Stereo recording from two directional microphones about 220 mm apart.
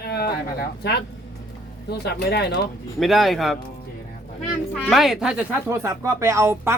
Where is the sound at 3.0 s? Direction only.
Centre (ahead or behind).